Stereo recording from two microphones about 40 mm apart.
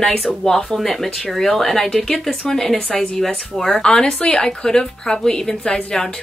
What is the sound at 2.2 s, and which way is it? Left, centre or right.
Speech, centre.